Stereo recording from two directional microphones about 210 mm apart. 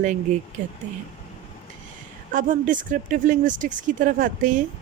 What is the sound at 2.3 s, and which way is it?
Speech, 40° right (ahead or behind).